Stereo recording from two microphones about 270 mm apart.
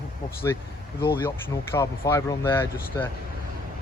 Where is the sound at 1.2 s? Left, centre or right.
Centre.